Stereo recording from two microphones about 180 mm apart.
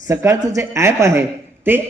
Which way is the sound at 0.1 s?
15° right (ahead or behind).